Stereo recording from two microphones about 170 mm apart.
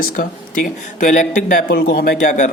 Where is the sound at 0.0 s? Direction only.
55° left (ahead or behind).